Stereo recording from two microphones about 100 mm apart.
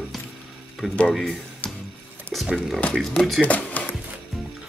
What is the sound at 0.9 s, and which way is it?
Speech, 5° left (ahead or behind).